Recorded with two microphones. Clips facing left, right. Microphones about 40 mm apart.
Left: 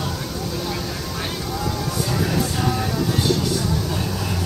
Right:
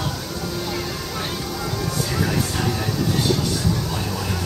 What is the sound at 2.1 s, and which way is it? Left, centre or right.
Music, centre.